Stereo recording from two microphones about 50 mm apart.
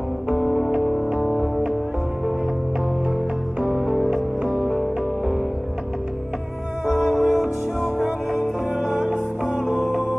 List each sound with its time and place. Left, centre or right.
0.3 s music: centre
3.6 s music: centre
6.9 s music: centre